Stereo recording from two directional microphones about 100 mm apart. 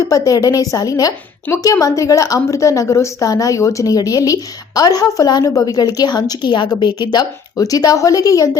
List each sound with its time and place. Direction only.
0.0 s a woman's voice: 35° left (ahead or behind)